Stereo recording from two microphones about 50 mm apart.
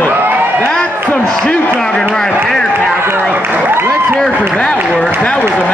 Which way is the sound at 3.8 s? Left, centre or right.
Centre.